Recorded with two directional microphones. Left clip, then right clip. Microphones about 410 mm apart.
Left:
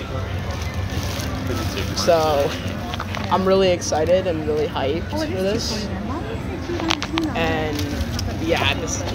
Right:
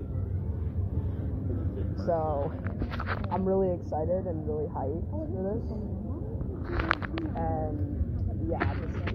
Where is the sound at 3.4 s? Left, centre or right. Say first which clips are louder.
Left 10 dB; centre.